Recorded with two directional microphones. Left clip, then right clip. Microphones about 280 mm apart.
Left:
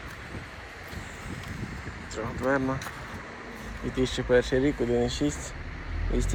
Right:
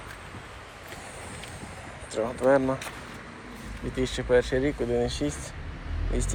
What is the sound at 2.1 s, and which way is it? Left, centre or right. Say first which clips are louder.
Speech: right 5 dB; centre.